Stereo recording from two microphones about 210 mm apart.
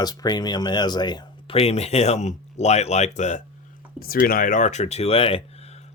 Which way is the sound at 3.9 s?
45° left (ahead or behind).